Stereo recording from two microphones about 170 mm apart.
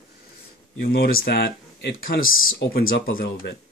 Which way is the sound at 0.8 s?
60° left (ahead or behind).